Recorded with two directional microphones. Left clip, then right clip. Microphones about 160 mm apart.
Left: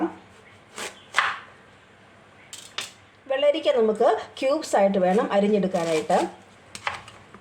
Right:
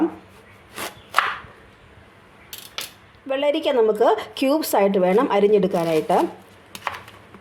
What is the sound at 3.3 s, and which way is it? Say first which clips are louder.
Speech: right 1 dB; 40° right (ahead or behind).